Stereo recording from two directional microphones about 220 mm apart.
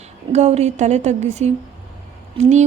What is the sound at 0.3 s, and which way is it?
A woman's voice, 30° right (ahead or behind).